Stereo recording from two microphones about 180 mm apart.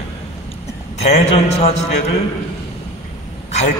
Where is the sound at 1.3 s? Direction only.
35° left (ahead or behind).